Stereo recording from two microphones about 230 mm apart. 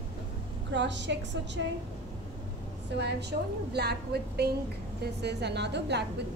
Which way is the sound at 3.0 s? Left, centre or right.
Right.